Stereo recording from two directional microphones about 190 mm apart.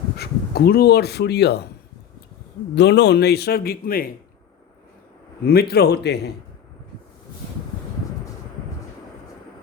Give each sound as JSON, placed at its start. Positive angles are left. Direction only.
{"t": 0.2, "sound": "speech", "side_deg": 55}
{"t": 2.7, "sound": "speech", "side_deg": 65}
{"t": 5.5, "sound": "speech", "side_deg": 55}